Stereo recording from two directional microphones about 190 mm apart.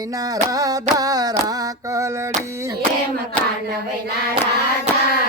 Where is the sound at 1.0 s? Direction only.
20° right (ahead or behind).